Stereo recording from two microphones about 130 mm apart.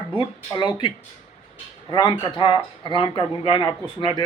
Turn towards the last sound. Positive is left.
turn(degrees=35)  # may be behind; listen again after turning